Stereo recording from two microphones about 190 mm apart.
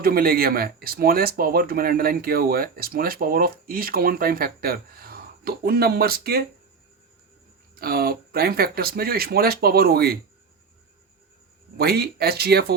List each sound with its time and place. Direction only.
0.0 s speech: 50° right (ahead or behind)
7.8 s speech: 50° right (ahead or behind)
11.8 s speech: 55° right (ahead or behind)